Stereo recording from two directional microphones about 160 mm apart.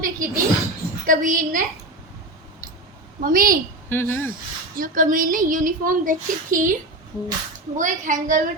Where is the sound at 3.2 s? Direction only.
60° right (ahead or behind).